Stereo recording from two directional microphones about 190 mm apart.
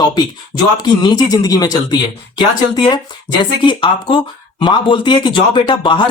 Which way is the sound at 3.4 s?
25° left (ahead or behind).